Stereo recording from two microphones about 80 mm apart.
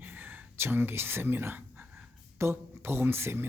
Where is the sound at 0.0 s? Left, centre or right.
Right.